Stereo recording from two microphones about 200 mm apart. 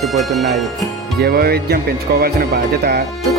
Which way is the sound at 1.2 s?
50° right (ahead or behind).